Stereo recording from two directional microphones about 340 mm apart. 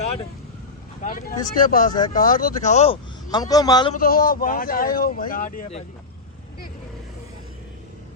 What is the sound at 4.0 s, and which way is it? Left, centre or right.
Speech, left.